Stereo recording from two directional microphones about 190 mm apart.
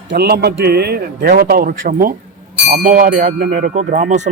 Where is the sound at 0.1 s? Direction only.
55° right (ahead or behind).